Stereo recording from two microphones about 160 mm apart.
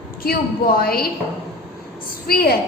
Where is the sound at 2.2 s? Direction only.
70° left (ahead or behind).